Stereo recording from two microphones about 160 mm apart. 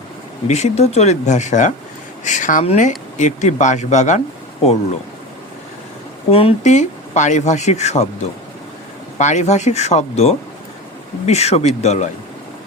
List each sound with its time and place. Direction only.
0.4 s speech: 45° left (ahead or behind)
6.3 s speech: 40° left (ahead or behind)